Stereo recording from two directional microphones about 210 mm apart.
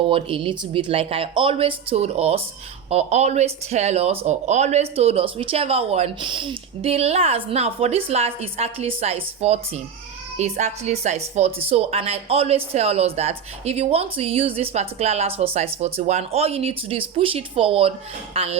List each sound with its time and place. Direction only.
0.0 s a woman's voice: 25° right (ahead or behind)